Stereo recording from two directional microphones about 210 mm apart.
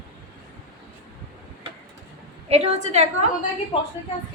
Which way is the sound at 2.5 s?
30° right (ahead or behind).